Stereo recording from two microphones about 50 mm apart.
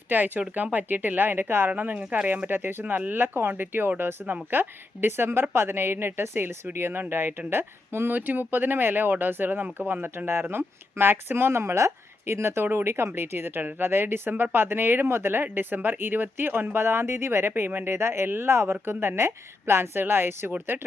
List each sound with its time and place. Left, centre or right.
0.1 s speech: right
1.7 s speech: right
2.5 s speech: right